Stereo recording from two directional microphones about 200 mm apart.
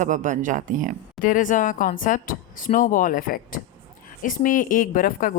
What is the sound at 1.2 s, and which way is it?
Speech, 40° left (ahead or behind).